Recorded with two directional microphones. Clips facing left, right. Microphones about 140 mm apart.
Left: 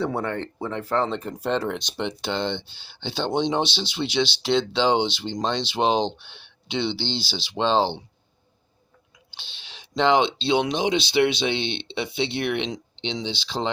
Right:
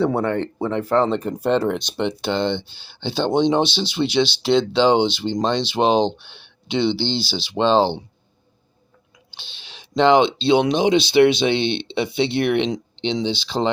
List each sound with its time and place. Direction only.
0.0 s speech: 60° right (ahead or behind)
9.9 s speech: 55° right (ahead or behind)